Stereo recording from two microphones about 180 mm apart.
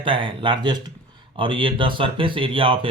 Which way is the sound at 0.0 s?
30° right (ahead or behind).